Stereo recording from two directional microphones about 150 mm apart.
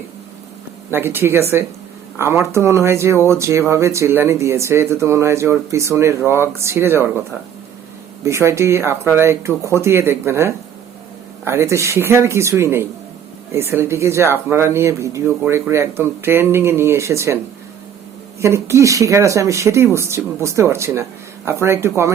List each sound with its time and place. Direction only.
0.9 s speech: 15° right (ahead or behind)
8.2 s speech: 20° right (ahead or behind)